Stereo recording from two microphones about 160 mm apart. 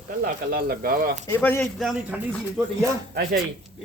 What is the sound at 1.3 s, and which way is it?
Speech, 10° left (ahead or behind).